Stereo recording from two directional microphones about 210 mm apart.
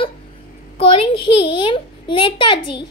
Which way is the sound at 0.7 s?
25° left (ahead or behind).